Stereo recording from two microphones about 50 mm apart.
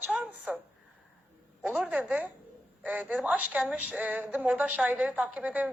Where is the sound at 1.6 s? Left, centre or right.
Right.